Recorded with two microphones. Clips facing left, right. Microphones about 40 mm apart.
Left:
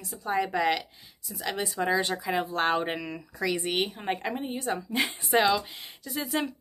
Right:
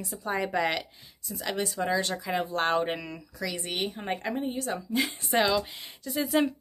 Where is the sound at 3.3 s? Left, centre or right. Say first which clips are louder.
Left 5 dB; left.